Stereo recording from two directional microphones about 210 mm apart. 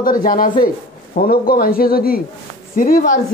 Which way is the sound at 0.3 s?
40° left (ahead or behind).